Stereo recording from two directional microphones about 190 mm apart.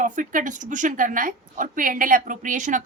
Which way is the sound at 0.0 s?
45° right (ahead or behind).